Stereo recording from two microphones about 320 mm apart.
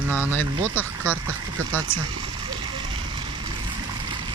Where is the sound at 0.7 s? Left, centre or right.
Centre.